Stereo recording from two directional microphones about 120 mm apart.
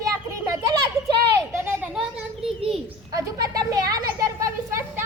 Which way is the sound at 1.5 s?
20° right (ahead or behind).